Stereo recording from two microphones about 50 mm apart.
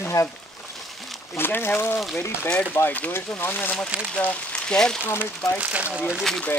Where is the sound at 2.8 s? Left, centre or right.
Left.